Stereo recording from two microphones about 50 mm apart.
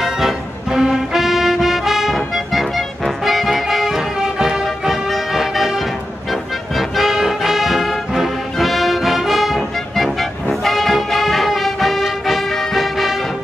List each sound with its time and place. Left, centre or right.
0.0 s music: centre